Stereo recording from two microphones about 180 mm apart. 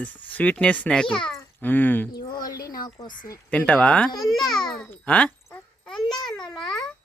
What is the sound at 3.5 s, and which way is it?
Speech, 10° left (ahead or behind).